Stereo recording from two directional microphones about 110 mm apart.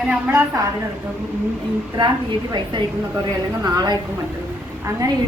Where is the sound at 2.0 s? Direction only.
40° right (ahead or behind).